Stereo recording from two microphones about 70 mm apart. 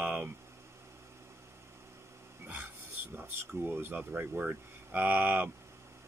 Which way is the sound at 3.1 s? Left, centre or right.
Right.